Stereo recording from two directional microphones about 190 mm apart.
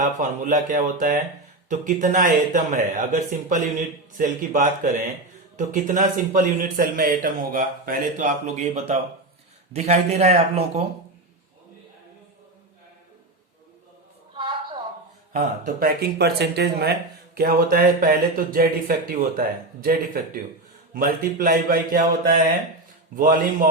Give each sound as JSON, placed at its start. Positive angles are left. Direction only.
{"t": 0.2, "sound": "speech", "side_deg": -40}
{"t": 14.3, "sound": "a sound", "side_deg": -25}
{"t": 15.6, "sound": "speech", "side_deg": -50}